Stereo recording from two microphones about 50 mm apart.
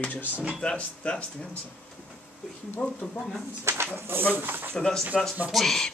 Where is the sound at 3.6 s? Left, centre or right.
Right.